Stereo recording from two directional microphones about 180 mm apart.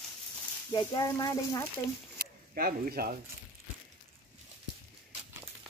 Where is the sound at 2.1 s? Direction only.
55° right (ahead or behind).